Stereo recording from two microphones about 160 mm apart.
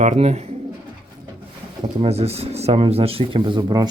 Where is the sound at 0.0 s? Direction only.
45° right (ahead or behind).